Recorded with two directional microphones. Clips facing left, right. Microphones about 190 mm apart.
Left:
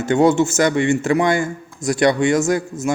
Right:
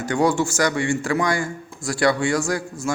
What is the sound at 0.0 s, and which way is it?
A man's voice, 25° left (ahead or behind).